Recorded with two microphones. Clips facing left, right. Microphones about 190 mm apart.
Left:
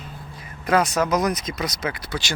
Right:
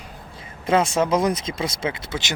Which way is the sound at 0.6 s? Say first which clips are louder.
Right 1 dB; 25° right (ahead or behind).